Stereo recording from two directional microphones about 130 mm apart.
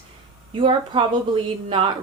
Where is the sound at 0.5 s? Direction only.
40° right (ahead or behind).